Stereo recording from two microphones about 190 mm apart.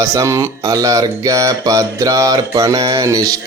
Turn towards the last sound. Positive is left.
turn(degrees=-20)  # may be behind; listen again after turning